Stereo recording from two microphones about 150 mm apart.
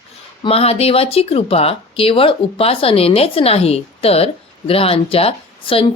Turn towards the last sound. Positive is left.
turn(degrees=40)  # may be behind; listen again after turning